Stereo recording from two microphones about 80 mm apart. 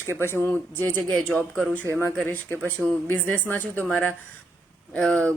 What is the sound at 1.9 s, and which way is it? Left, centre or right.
Speech, left.